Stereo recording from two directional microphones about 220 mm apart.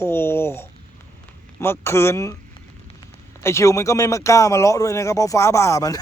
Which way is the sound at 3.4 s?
15° left (ahead or behind).